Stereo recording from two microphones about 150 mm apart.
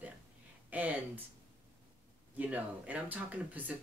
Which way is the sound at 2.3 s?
10° right (ahead or behind).